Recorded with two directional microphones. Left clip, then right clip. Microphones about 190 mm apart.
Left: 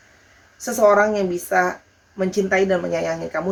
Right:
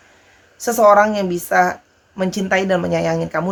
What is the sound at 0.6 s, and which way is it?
Speech, 40° right (ahead or behind).